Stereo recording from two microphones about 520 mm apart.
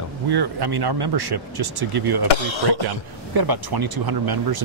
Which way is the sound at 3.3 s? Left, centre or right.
Right.